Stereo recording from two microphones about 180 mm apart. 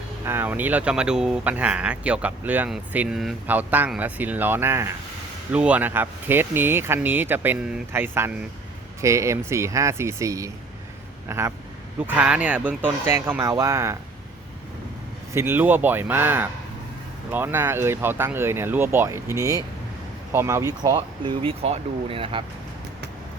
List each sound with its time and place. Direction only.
0.3 s speech: 10° right (ahead or behind)
15.3 s speech: 15° right (ahead or behind); by 22.4 s 30° right (ahead or behind)